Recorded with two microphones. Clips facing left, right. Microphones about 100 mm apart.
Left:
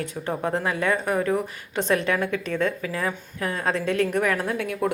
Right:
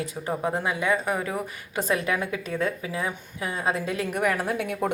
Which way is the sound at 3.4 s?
5° right (ahead or behind).